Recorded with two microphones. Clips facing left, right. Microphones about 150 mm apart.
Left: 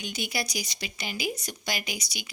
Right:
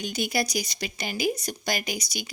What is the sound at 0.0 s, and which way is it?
Speech, 45° right (ahead or behind).